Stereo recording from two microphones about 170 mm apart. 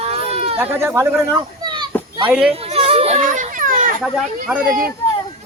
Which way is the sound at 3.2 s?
50° right (ahead or behind).